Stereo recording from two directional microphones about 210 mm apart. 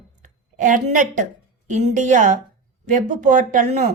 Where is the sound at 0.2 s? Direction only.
40° right (ahead or behind).